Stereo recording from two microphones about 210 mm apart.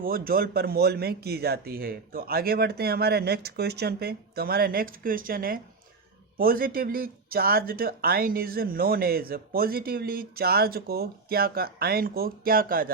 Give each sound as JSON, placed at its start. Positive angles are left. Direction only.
{"t": 0.0, "sound": "speech", "side_deg": -45}